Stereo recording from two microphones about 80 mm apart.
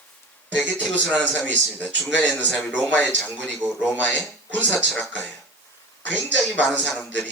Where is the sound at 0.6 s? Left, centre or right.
Centre.